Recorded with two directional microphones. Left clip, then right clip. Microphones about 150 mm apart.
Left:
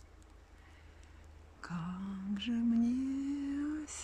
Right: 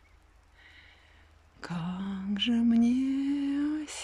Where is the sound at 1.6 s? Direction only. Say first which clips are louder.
Right 6 dB; 15° right (ahead or behind).